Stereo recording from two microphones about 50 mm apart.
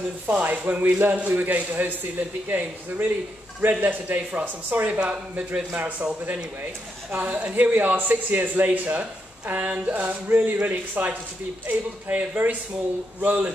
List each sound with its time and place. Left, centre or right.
0.3 s speech: right
5.0 s a man's voice: right